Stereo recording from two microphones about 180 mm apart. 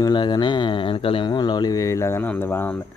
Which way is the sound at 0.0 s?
25° left (ahead or behind).